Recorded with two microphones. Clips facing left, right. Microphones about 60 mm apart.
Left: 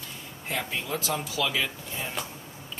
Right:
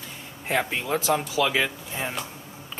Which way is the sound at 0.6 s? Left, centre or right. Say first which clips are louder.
Right 6 dB; right.